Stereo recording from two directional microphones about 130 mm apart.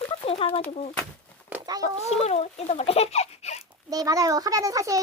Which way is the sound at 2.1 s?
55° left (ahead or behind).